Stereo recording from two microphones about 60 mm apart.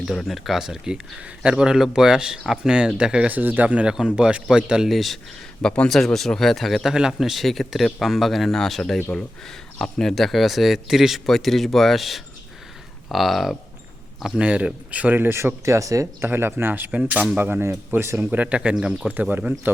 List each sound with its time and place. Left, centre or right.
0.3 s speech: centre; by 3.8 s right
3.8 s speech: centre
4.9 s speech: centre
5.6 s speech: centre
6.1 s a man's voice: centre
14.4 s speech: right
15.2 s speech: right
16.2 s speech: right
16.9 s speech: right
18.2 s speech: right
19.0 s speech: right